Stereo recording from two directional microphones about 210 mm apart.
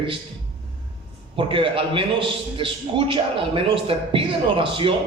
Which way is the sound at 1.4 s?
25° right (ahead or behind).